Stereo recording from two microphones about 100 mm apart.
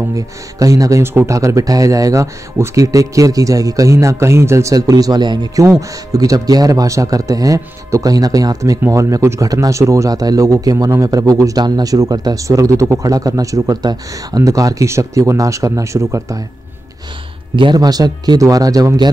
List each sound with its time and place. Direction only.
0.1 s speech: 35° right (ahead or behind)
5.8 s speech: 35° right (ahead or behind)
17.6 s speech: 45° right (ahead or behind)